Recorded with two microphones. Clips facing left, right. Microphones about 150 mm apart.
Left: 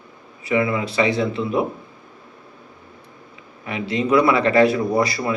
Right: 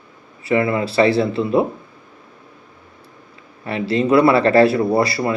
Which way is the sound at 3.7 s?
35° right (ahead or behind).